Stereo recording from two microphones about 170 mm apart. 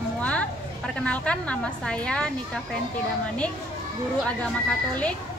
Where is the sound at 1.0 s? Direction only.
5° left (ahead or behind).